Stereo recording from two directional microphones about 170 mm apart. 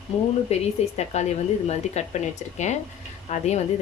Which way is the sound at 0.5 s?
40° left (ahead or behind).